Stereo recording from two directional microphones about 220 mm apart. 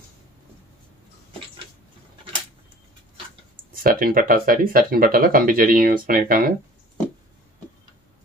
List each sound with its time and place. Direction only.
3.7 s speech: 40° right (ahead or behind)